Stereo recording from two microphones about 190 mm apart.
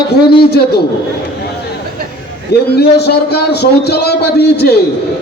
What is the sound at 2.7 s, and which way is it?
A man's voice, 60° left (ahead or behind).